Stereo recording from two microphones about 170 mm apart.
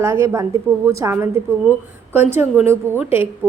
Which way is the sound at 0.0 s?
15° right (ahead or behind).